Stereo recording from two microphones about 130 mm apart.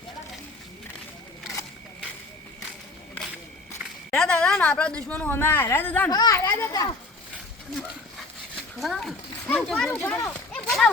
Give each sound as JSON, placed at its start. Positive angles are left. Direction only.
{"t": 4.1, "sound": "a woman's voice", "side_deg": 5}
{"t": 6.1, "sound": "speech", "side_deg": 30}
{"t": 8.8, "sound": "a child's voice", "side_deg": 0}
{"t": 10.0, "sound": "speech", "side_deg": 20}
{"t": 10.5, "sound": "a sound", "side_deg": 5}